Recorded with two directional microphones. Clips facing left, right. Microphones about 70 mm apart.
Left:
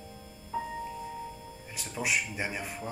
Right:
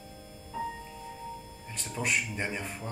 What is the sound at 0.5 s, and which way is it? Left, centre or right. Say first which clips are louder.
Music: left 1 dB; left.